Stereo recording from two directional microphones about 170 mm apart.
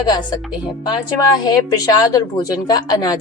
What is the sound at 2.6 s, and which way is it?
Speech, 25° left (ahead or behind).